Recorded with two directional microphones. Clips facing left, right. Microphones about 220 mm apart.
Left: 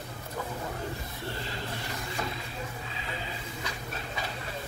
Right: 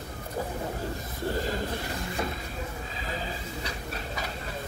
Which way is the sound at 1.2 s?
45° right (ahead or behind).